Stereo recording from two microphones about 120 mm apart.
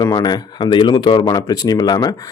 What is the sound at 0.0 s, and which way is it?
Speech, 35° left (ahead or behind).